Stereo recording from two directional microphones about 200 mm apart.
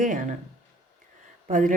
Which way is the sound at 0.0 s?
40° right (ahead or behind).